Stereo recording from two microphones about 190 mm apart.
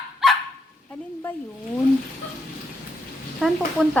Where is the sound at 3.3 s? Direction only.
Centre (ahead or behind).